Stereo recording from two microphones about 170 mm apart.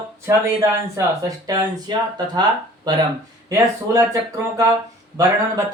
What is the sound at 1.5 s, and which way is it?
Speech, 25° right (ahead or behind).